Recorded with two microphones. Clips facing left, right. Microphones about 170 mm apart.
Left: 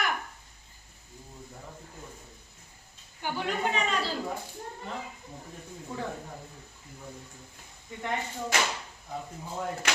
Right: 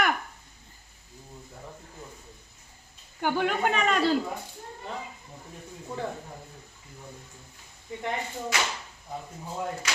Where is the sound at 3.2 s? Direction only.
55° right (ahead or behind).